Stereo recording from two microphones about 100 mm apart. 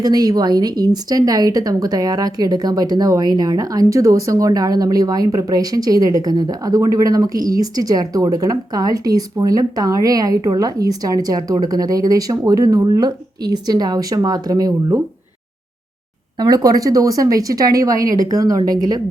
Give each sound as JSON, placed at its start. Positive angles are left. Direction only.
{"t": 0.0, "sound": "a woman's voice", "side_deg": -40}
{"t": 16.4, "sound": "a woman's voice", "side_deg": -40}